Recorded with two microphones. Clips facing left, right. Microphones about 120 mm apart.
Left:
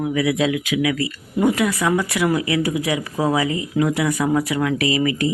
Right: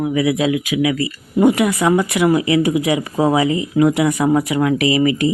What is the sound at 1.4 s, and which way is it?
Speech, 20° right (ahead or behind).